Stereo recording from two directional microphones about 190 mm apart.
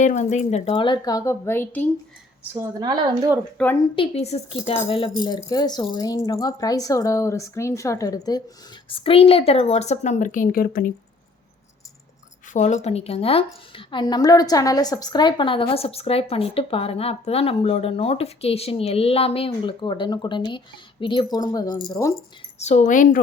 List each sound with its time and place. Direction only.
0.0 s a woman's voice: 40° left (ahead or behind); by 1.8 s 10° left (ahead or behind)
2.5 s a woman's voice: 15° right (ahead or behind)
3.6 s a woman's voice: 5° left (ahead or behind)
3.9 s a woman's voice: 30° left (ahead or behind); by 10.9 s 50° left (ahead or behind)
12.5 s a woman's voice: 40° left (ahead or behind); by 22.1 s 20° left (ahead or behind)
22.5 s speech: 40° left (ahead or behind)